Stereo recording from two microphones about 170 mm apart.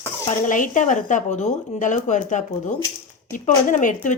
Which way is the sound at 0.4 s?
50° left (ahead or behind).